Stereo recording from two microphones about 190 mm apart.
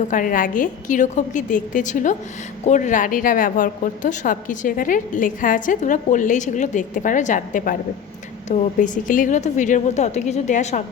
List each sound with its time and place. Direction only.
0.1 s a woman's voice: 45° left (ahead or behind)